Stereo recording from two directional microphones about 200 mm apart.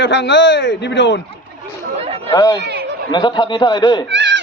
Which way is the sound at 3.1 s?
20° left (ahead or behind).